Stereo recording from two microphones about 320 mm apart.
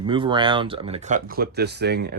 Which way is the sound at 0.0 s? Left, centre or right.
Centre.